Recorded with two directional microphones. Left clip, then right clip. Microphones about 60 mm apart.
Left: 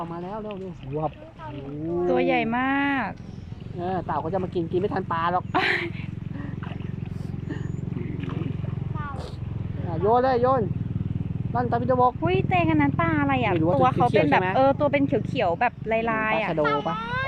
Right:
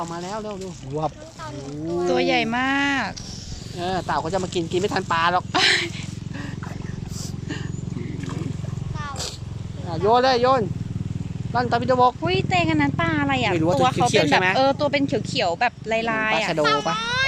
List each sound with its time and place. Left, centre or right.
0.0 s speech: right
1.9 s a child's voice: right
3.8 s a child's voice: right
9.9 s speech: right
12.2 s a child's voice: right
13.6 s a child's voice: right